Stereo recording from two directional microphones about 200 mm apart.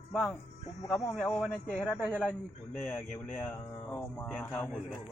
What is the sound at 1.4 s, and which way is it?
Speech, centre (ahead or behind).